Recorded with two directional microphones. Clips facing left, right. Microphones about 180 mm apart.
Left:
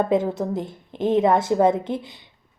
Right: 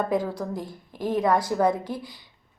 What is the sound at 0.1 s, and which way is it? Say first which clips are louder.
A woman's voice: left 5 dB; 25° left (ahead or behind).